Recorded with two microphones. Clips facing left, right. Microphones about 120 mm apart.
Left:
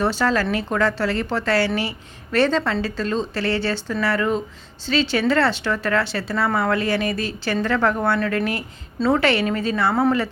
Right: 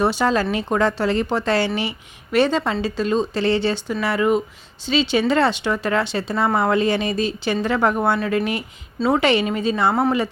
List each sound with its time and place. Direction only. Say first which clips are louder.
0.0 s speech: right 2 dB; 15° right (ahead or behind)